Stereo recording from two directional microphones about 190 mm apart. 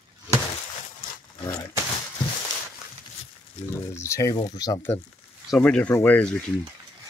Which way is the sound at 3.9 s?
15° left (ahead or behind).